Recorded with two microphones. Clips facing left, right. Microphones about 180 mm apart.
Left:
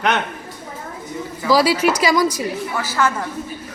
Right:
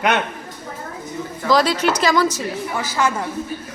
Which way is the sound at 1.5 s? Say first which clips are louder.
Left 2 dB; 10° left (ahead or behind).